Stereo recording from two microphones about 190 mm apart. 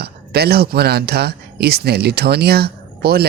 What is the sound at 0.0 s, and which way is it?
Speech, 55° right (ahead or behind).